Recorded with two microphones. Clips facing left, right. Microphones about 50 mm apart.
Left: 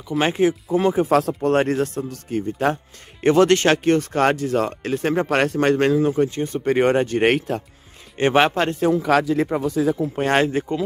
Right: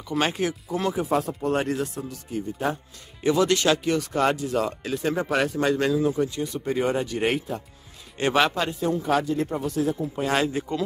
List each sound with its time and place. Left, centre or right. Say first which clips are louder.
0.2 s speech: left 7 dB; left
1.0 s speech: left 6 dB; left
6.7 s speech: left 8 dB; left
8.2 s speech: left 5 dB; left
8.7 s speech: left 6 dB; left
10.1 s speech: left 5 dB; left